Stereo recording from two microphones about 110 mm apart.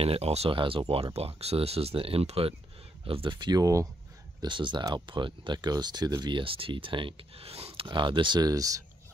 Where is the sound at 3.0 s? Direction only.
55° right (ahead or behind); by 3.9 s 30° right (ahead or behind).